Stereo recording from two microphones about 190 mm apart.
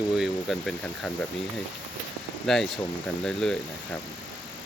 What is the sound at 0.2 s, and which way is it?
Speech, centre (ahead or behind).